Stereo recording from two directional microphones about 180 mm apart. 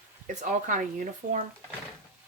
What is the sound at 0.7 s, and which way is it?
Speech, 45° right (ahead or behind).